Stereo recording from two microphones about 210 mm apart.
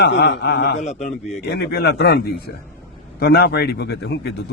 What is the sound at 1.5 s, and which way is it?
A man's voice, 50° left (ahead or behind).